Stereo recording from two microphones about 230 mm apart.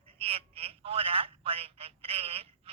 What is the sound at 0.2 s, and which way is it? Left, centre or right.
Telephone, right.